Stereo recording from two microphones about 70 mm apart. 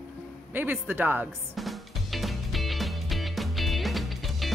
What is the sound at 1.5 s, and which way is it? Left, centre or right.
Music, centre.